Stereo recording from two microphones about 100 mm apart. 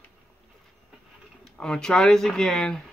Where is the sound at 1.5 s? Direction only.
5° left (ahead or behind).